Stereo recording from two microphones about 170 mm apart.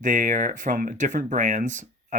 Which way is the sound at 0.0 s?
50° right (ahead or behind).